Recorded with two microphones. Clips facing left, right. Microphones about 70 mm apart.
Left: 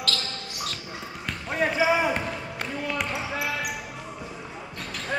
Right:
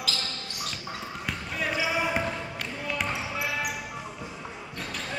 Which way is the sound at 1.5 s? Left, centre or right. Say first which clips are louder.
Left 7 dB; left.